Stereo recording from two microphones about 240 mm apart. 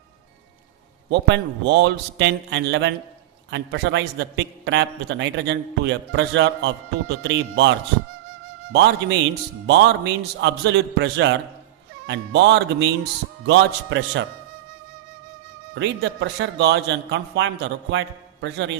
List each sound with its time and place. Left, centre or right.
1.1 s a man's voice: right
15.7 s a man's voice: right